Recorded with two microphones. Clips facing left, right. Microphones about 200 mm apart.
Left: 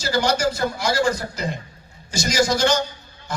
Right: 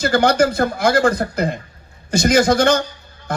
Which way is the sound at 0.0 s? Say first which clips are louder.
Right 6 dB; 55° right (ahead or behind).